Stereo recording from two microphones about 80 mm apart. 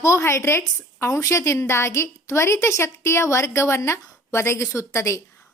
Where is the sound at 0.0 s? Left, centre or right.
Left.